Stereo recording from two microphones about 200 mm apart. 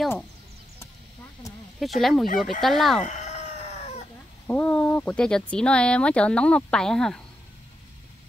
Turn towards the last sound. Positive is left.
turn(degrees=5)  # may be behind; listen again after turning